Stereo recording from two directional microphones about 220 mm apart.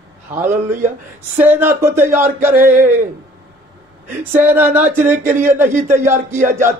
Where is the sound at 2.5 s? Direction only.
35° right (ahead or behind).